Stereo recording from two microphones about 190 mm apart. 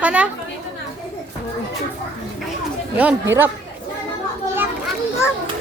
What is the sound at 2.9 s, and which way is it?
Speech, 10° right (ahead or behind).